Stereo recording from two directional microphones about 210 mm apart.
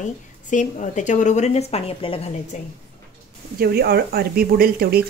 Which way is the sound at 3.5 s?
50° right (ahead or behind).